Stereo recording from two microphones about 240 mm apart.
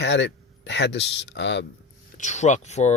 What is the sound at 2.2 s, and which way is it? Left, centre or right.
Speech, left.